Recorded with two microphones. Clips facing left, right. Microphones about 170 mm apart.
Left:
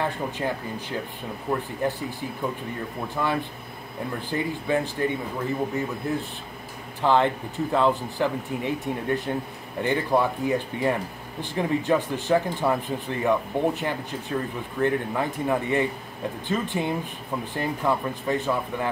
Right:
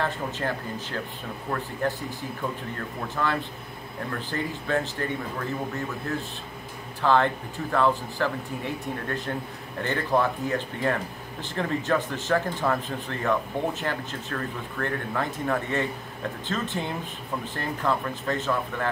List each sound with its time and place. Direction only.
0.0 s speech: 15° left (ahead or behind)
3.2 s speech: 10° left (ahead or behind)